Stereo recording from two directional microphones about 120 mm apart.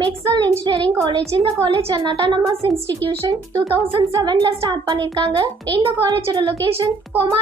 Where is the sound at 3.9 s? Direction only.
40° right (ahead or behind).